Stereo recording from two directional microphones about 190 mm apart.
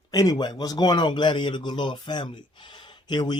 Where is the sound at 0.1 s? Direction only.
20° left (ahead or behind).